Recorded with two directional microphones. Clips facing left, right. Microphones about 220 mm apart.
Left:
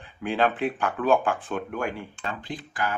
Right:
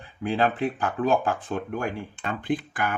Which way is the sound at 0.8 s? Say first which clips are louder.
Left 1 dB; 35° right (ahead or behind).